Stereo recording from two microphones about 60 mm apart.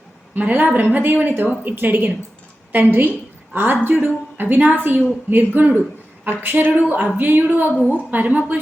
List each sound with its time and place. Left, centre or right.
0.3 s a woman's voice: right